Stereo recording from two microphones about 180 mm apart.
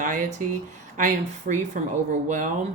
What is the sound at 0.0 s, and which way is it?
Speech, 45° right (ahead or behind).